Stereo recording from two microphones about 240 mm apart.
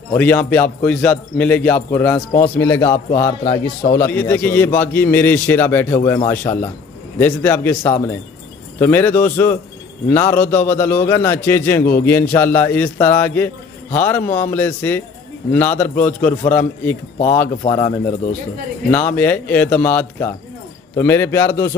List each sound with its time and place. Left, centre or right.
0.1 s a man's voice: centre
17.6 s a man's voice: centre
18.9 s a man's voice: centre